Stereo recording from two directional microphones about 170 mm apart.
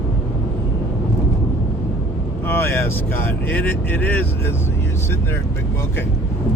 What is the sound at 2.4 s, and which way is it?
Speech, 15° left (ahead or behind).